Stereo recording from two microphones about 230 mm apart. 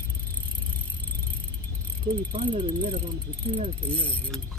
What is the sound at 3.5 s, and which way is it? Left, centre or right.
Pulleys, right.